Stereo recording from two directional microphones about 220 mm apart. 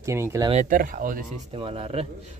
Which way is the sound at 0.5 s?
40° right (ahead or behind).